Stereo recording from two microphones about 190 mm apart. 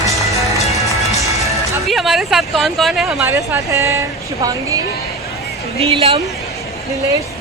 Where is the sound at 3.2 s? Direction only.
15° right (ahead or behind).